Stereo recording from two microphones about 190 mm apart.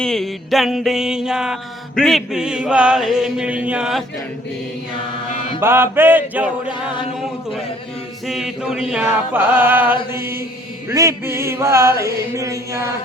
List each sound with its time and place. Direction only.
0.0 s a sound: centre (ahead or behind)
5.5 s chant: 10° right (ahead or behind)
6.7 s music: 25° left (ahead or behind)
8.3 s chant: 5° right (ahead or behind)